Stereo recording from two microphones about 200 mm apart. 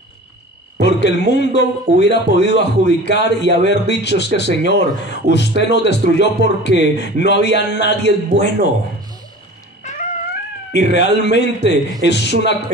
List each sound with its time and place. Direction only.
0.7 s a man's voice: 60° left (ahead or behind)
9.8 s music: 35° left (ahead or behind)
10.7 s a man's voice: 60° left (ahead or behind)